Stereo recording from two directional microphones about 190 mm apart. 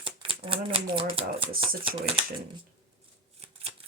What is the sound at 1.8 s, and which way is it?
Speech, 30° right (ahead or behind).